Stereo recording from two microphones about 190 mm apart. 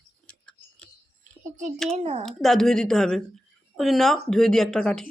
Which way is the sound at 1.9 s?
35° right (ahead or behind).